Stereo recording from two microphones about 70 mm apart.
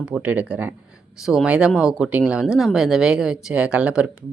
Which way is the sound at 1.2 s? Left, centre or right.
Centre.